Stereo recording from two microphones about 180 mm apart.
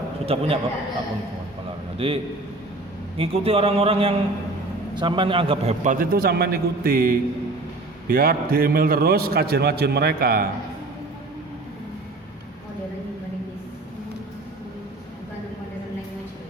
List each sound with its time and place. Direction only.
0.3 s speech: 30° right (ahead or behind)
2.0 s speech: 35° right (ahead or behind)
3.2 s a man's voice: 30° right (ahead or behind); by 10.5 s 55° right (ahead or behind)